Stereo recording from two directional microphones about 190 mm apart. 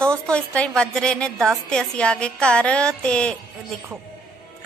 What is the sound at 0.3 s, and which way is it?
A woman's voice, 5° left (ahead or behind).